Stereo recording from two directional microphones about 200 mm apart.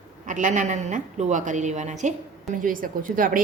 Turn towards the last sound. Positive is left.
turn(degrees=-45)  # may be behind; listen again after turning